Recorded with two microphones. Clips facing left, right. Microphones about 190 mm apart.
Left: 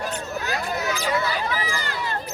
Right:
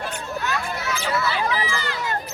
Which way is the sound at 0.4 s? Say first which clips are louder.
Left 1 dB; 35° left (ahead or behind).